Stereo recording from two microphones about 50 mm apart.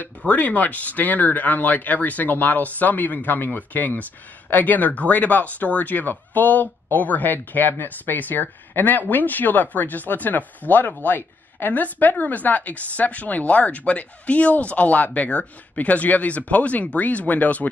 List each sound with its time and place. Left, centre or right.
0.3 s speech: left